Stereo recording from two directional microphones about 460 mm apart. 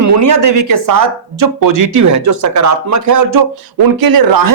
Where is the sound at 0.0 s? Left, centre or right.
Right.